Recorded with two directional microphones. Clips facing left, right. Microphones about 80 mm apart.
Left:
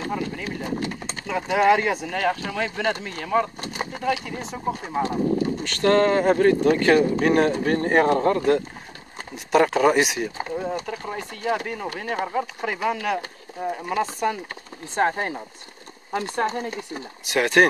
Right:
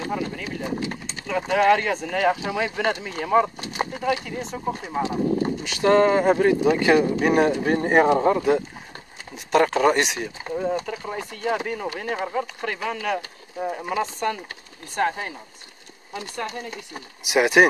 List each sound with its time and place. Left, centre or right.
0.1 s speech: centre
2.2 s speech: centre
15.1 s speech: left
17.2 s speech: centre